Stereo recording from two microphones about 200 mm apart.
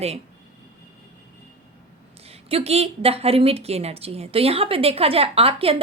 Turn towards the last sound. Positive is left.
turn(degrees=-30)  # may be behind; listen again after turning